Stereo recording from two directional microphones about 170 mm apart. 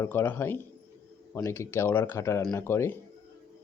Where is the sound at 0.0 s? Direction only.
15° left (ahead or behind).